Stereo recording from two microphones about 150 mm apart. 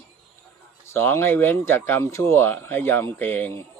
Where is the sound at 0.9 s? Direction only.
15° left (ahead or behind).